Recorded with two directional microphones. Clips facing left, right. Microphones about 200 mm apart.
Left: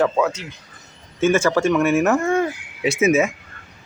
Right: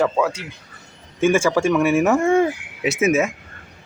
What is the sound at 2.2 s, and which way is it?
Speech, 25° right (ahead or behind).